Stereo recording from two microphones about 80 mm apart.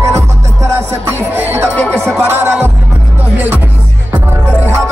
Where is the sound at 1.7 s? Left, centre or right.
Centre.